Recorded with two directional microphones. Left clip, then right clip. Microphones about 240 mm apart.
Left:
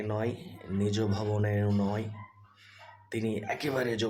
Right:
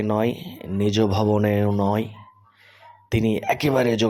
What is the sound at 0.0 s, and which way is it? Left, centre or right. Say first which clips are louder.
Speech: right 10 dB; right.